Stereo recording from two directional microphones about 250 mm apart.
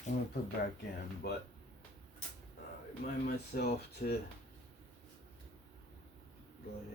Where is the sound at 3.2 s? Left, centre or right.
Left.